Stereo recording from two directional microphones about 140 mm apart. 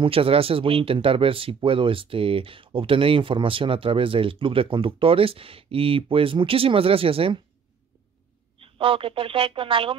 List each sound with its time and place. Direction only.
0.0 s speech: 40° right (ahead or behind)
8.5 s speech: 40° right (ahead or behind)